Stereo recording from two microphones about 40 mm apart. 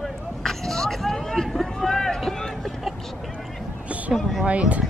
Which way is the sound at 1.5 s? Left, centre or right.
Centre.